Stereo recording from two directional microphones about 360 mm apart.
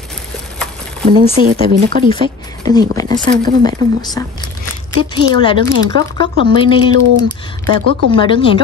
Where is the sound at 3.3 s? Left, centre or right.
Right.